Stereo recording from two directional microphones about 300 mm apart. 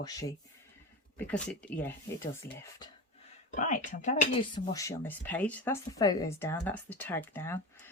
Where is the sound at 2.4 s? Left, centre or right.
Left.